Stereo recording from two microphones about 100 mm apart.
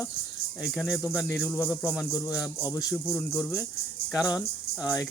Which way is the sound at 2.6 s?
35° left (ahead or behind).